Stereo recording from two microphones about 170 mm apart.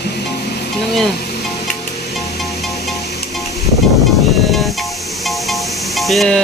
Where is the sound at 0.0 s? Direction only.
75° left (ahead or behind).